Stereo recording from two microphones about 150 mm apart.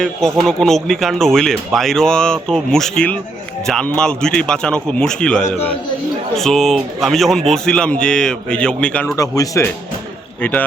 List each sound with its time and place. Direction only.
0.0 s speech: 5° left (ahead or behind)
9.1 s speech: 25° left (ahead or behind)
10.4 s a man's voice: 10° left (ahead or behind)